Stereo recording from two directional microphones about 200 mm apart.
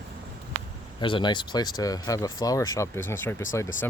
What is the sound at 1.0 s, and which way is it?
Speech, 25° left (ahead or behind).